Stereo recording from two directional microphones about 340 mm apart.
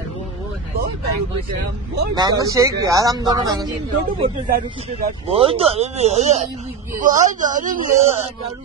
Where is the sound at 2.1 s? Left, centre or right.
Centre.